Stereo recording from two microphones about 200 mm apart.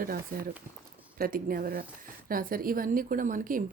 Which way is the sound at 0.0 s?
45° right (ahead or behind).